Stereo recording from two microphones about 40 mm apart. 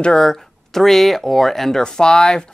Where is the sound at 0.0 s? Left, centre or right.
Left.